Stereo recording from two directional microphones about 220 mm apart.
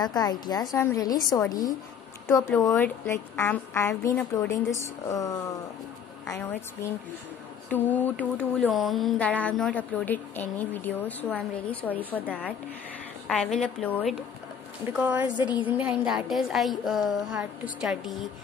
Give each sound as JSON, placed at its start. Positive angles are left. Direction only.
{"t": 0.0, "sound": "a sound", "side_deg": 20}
{"t": 13.3, "sound": "speech", "side_deg": 5}
{"t": 14.9, "sound": "a woman's voice", "side_deg": -10}